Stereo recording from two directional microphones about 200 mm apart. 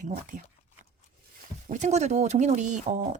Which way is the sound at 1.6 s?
35° right (ahead or behind).